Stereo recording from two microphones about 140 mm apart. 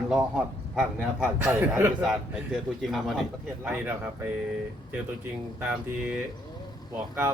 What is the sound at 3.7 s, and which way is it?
Speech, 15° right (ahead or behind).